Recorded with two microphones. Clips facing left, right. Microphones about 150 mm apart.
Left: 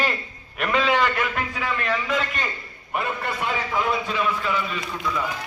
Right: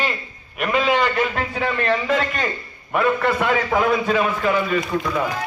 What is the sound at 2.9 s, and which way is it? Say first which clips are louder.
A man's voice: right 8 dB; 65° right (ahead or behind).